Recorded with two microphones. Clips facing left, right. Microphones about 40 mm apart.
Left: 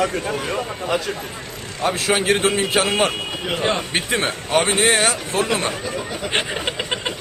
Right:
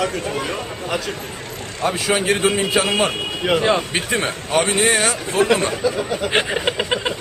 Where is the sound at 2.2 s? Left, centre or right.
Left.